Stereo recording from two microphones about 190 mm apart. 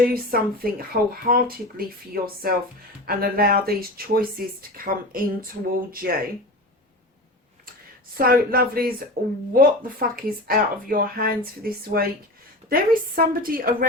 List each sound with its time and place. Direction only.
0.0 s speech: 50° right (ahead or behind)
8.2 s speech: 50° right (ahead or behind)